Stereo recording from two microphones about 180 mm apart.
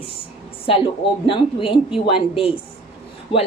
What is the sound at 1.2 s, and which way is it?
A woman's voice, 30° left (ahead or behind).